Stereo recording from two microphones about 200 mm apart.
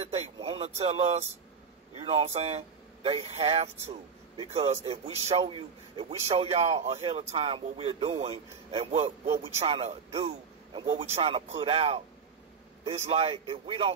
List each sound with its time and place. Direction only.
0.0 s a man's voice: 30° right (ahead or behind)
13.1 s a man's voice: 30° right (ahead or behind)